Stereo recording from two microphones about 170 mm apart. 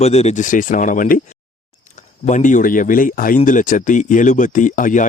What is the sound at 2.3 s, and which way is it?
Speech, 50° left (ahead or behind).